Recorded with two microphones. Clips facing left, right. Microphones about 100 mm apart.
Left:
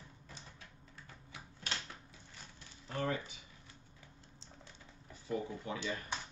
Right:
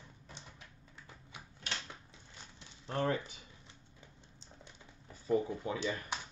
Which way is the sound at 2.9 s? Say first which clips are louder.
Right 3 dB; 30° right (ahead or behind).